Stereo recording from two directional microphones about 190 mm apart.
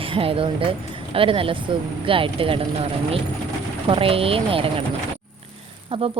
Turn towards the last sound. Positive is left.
turn(degrees=-30)  # may be behind; listen again after turning